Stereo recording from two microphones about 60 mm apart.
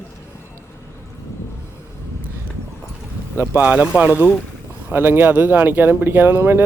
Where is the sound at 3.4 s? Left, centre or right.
Right.